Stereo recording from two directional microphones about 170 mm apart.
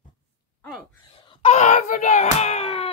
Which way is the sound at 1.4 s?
45° left (ahead or behind).